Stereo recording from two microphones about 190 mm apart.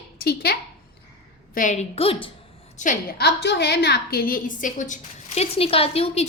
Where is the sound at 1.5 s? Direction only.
40° left (ahead or behind).